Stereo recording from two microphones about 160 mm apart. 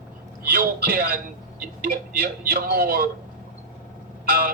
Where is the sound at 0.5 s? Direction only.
65° right (ahead or behind).